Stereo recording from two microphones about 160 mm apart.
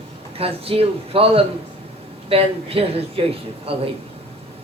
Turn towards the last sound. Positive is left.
turn(degrees=-40)  # may be behind; listen again after turning